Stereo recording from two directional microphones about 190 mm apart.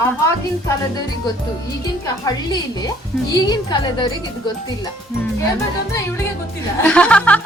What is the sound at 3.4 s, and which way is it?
Speech, 20° left (ahead or behind).